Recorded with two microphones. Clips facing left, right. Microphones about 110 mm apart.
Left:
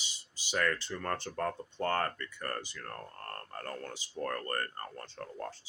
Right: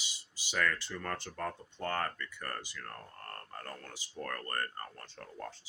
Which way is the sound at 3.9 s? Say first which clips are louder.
Left 4 dB; 25° left (ahead or behind).